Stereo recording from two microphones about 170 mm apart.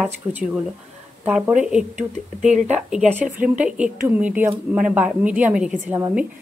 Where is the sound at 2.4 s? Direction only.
40° right (ahead or behind).